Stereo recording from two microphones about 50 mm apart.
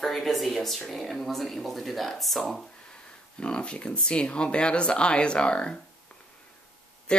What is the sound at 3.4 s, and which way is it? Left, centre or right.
Speech, centre.